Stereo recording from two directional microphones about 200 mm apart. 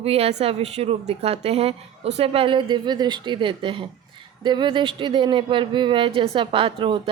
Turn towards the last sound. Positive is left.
turn(degrees=-25)  # may be behind; listen again after turning